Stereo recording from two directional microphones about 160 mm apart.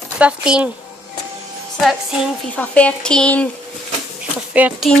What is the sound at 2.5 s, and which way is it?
Speech, 10° left (ahead or behind).